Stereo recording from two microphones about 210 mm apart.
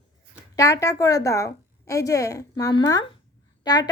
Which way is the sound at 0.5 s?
15° left (ahead or behind).